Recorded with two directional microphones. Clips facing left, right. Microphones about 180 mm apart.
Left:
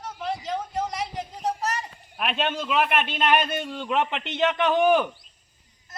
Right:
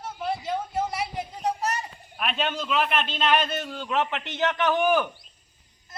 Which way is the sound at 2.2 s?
10° left (ahead or behind).